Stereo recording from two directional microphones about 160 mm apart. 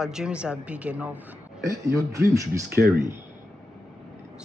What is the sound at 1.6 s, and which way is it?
Speech, 20° right (ahead or behind).